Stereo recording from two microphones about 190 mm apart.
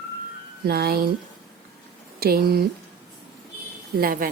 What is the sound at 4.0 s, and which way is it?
Speech, 50° right (ahead or behind).